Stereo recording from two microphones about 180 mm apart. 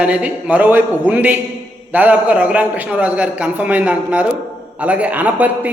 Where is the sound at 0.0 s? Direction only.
5° right (ahead or behind).